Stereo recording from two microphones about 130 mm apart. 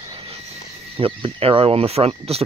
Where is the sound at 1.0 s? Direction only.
45° right (ahead or behind).